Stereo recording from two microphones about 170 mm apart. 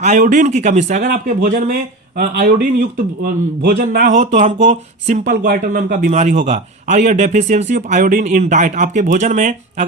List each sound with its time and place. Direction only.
0.0 s speech: 45° right (ahead or behind)